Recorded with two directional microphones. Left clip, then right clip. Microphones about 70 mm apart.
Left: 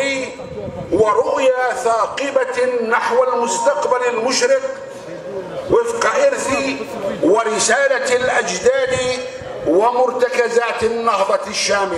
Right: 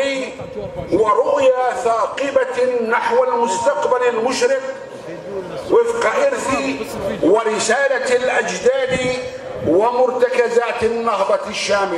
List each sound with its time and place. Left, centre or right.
0.9 s a man's voice: left
5.7 s a man's voice: left